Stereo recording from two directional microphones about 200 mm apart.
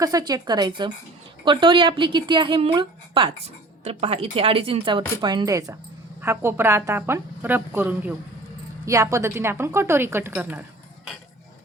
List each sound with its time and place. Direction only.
0.0 s a woman's voice: 20° right (ahead or behind)